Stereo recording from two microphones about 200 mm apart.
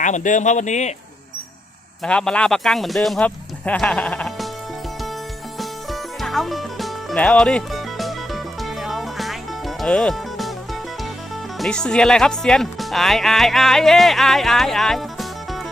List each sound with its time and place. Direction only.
0.0 s speech: 40° left (ahead or behind)
2.0 s speech: 5° left (ahead or behind)
5.5 s music: centre (ahead or behind)
11.5 s speech: centre (ahead or behind)